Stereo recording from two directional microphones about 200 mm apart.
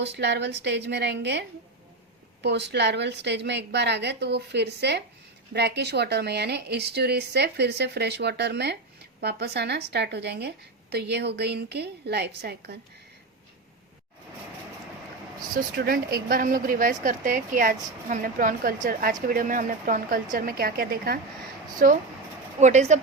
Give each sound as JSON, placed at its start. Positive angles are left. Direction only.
{"t": 0.0, "sound": "a woman's voice", "side_deg": -60}
{"t": 15.5, "sound": "a woman's voice", "side_deg": -50}